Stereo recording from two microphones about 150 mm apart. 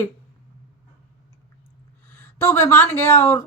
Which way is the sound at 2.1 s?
15° left (ahead or behind).